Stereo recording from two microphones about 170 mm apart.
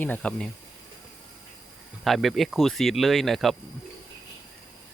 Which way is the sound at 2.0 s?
Centre (ahead or behind).